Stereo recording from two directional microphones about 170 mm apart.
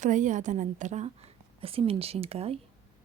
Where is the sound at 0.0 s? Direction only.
45° right (ahead or behind).